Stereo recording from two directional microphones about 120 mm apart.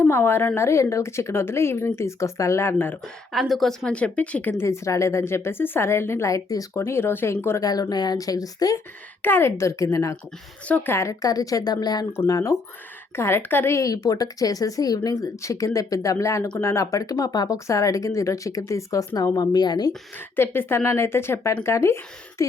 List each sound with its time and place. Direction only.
0.0 s a woman's voice: 20° left (ahead or behind)
3.0 s a woman's voice: centre (ahead or behind); by 7.7 s 20° left (ahead or behind)
7.7 s speech: 35° left (ahead or behind)
9.2 s a woman's voice: 20° left (ahead or behind)
10.7 s a woman's voice: 10° left (ahead or behind)
10.9 s a woman's voice: 25° left (ahead or behind)
20.1 s a woman's voice: 20° left (ahead or behind)